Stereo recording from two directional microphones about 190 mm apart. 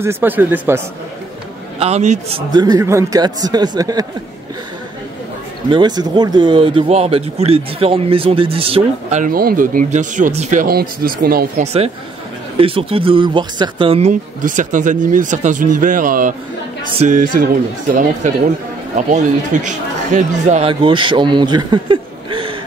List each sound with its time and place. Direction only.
0.0 s speech: 10° right (ahead or behind)
1.8 s speech: 35° right (ahead or behind); by 4.0 s 20° right (ahead or behind)
5.7 s speech: 20° right (ahead or behind)
9.2 s speech: 50° right (ahead or behind)
11.6 s speech: 30° right (ahead or behind)
18.9 s speech: 40° right (ahead or behind)